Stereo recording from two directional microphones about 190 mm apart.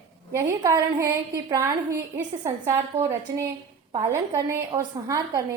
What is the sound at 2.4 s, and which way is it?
Speech, 15° right (ahead or behind).